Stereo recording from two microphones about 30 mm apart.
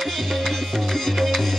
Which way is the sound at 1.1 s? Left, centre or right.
Centre.